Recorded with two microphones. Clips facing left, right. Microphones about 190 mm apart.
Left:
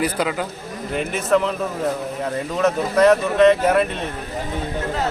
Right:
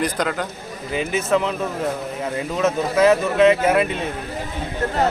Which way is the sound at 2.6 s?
5° right (ahead or behind).